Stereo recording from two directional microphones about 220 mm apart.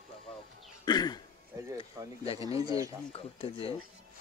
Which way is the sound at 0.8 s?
20° left (ahead or behind).